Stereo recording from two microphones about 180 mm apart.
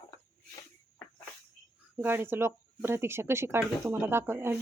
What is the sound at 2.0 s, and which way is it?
Speech, 10° right (ahead or behind).